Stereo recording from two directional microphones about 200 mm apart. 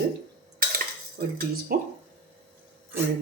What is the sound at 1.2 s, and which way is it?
Speech, 45° right (ahead or behind).